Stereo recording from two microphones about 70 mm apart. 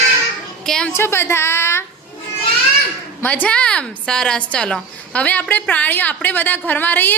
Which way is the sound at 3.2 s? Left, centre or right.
Left.